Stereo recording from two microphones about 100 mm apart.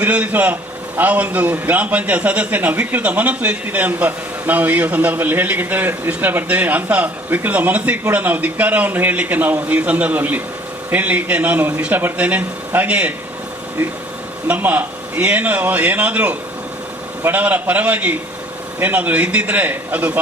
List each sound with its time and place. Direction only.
0.0 s a man's voice: 15° right (ahead or behind)
14.4 s a man's voice: 15° right (ahead or behind)